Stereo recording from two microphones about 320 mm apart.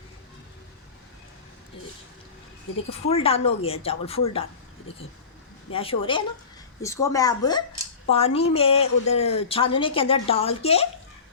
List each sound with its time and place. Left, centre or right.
3.1 s a woman's voice: centre
5.7 s a woman's voice: centre